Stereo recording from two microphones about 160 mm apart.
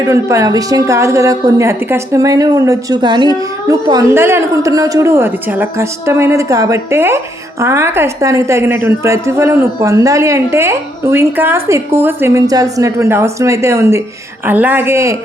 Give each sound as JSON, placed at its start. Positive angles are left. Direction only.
{"t": 0.0, "sound": "a woman's voice", "side_deg": -20}